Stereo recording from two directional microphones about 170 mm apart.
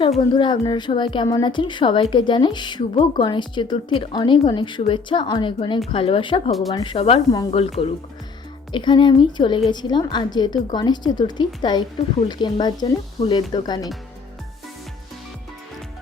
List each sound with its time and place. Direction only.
0.3 s a woman's voice: 25° left (ahead or behind)